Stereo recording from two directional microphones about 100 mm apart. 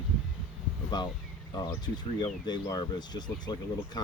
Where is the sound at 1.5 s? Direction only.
45° left (ahead or behind).